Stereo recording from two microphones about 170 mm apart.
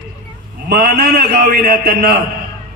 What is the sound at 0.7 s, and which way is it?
A man's voice, 65° right (ahead or behind).